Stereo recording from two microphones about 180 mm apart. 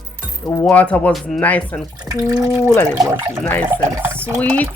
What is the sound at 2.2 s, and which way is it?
Speech, 20° right (ahead or behind).